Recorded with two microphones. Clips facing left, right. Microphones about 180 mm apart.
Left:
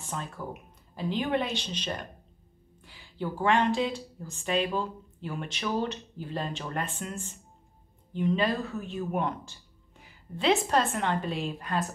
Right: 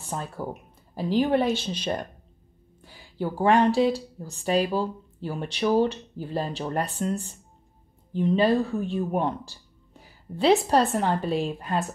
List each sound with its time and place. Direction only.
0.0 s speech: 35° right (ahead or behind)
1.5 s speech: 10° right (ahead or behind)
2.8 s a sound: 40° right (ahead or behind)
3.6 s speech: 35° right (ahead or behind)